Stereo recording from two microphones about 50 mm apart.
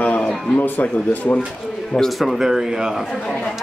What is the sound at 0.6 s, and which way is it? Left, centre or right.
Speech, left.